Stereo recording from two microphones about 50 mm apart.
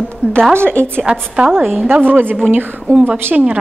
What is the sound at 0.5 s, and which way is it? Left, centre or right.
Speech, right.